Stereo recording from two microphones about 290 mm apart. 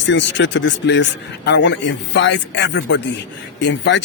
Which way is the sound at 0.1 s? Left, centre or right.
Left.